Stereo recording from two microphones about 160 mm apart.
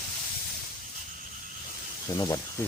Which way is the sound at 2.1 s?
20° left (ahead or behind).